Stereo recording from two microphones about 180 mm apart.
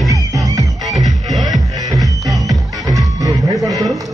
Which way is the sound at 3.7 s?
Centre (ahead or behind).